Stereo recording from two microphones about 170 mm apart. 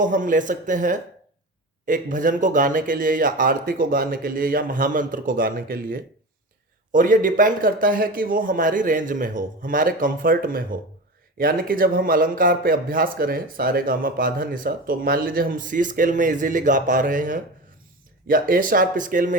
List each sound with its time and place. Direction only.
0.0 s a man's voice: 50° right (ahead or behind)